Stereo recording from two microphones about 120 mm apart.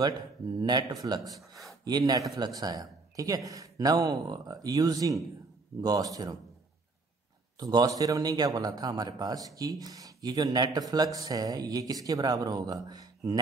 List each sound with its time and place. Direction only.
0.0 s speech: 35° right (ahead or behind)
7.5 s speech: 30° right (ahead or behind)